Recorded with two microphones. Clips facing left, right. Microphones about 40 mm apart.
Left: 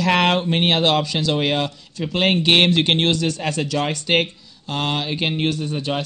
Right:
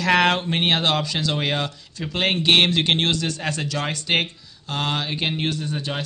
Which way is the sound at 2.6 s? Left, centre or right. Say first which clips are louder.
Left 3 dB; left.